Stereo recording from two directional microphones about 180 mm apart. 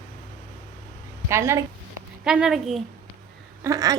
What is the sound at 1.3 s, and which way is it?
Speech, 15° right (ahead or behind).